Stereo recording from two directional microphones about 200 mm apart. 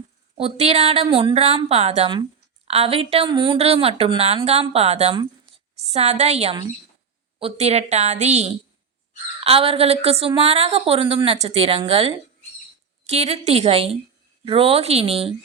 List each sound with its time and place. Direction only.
0.3 s a woman's voice: 30° right (ahead or behind)